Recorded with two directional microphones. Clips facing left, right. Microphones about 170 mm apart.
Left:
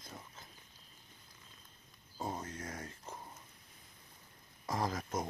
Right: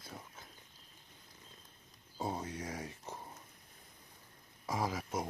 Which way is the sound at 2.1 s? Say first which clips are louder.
Right 2 dB; 10° right (ahead or behind).